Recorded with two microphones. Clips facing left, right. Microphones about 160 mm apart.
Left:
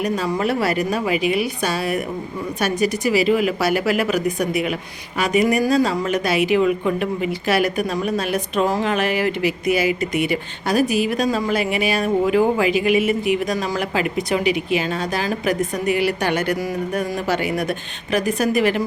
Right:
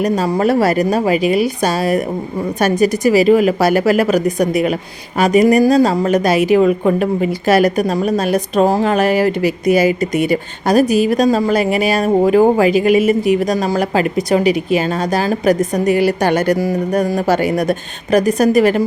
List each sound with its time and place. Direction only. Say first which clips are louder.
0.0 s speech: right 6 dB; 40° right (ahead or behind)